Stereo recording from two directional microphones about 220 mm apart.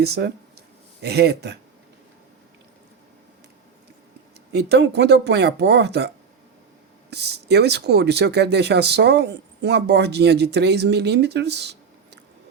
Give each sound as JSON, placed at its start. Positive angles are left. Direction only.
{"t": 0.0, "sound": "speech", "side_deg": -45}
{"t": 4.5, "sound": "speech", "side_deg": -50}
{"t": 7.1, "sound": "speech", "side_deg": -50}